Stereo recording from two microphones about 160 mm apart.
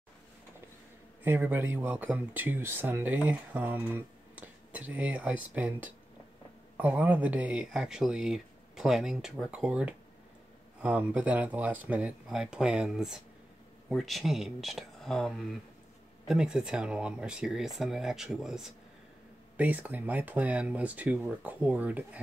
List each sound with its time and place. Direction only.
1.2 s speech: 15° right (ahead or behind)